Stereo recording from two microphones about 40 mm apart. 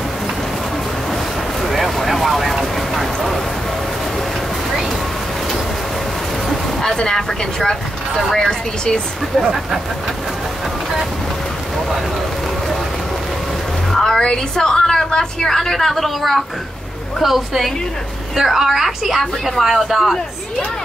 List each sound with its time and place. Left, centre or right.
1.7 s vehicle: centre
7.0 s speech: centre
13.9 s a sound: centre
14.2 s a woman's voice: centre